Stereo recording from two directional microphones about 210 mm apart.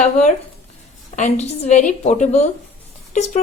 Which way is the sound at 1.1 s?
35° left (ahead or behind).